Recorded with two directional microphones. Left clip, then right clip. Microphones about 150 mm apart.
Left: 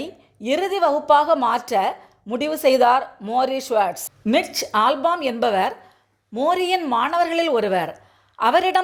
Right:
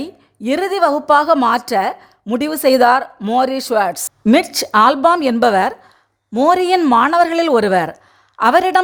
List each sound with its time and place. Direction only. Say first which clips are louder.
0.0 s a woman's voice: right 4 dB; 30° right (ahead or behind)